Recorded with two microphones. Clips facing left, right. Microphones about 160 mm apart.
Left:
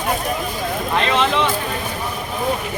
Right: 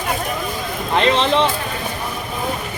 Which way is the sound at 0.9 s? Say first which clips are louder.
Right 3 dB; 30° right (ahead or behind).